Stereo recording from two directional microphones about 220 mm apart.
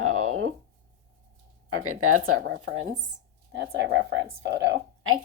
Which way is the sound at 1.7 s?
80° right.